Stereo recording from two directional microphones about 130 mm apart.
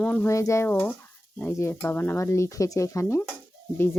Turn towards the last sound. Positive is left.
turn(degrees=20)  # may be behind; listen again after turning